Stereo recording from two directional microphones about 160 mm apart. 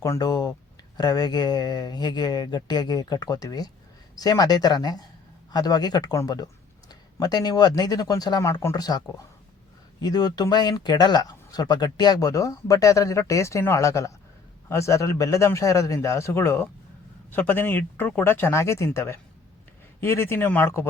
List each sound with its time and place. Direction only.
0.0 s speech: 20° left (ahead or behind)